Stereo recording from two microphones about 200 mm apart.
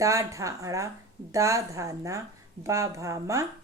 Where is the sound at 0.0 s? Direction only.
15° right (ahead or behind).